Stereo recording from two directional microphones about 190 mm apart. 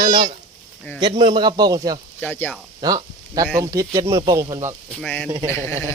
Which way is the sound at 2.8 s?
20° right (ahead or behind).